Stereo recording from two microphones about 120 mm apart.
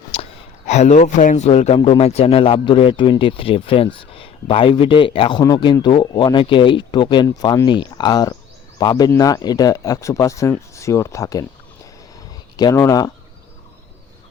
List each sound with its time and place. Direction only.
0.1 s a sound: 55° left (ahead or behind)
0.7 s speech: 75° left (ahead or behind); by 1.5 s 90° left
1.5 s a man's voice: 65° left (ahead or behind); by 5.4 s 50° left (ahead or behind)
5.4 s a man's voice: 35° left (ahead or behind)
7.4 s speech: 30° left (ahead or behind)
7.7 s speech: 40° left (ahead or behind)
12.7 s speech: 25° left (ahead or behind)